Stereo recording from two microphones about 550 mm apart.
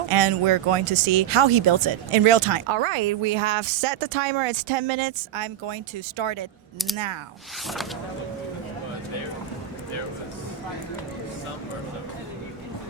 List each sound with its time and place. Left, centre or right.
0.1 s speech: right
6.9 s speech: right